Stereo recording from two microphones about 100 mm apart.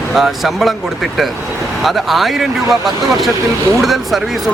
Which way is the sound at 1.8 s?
Centre (ahead or behind).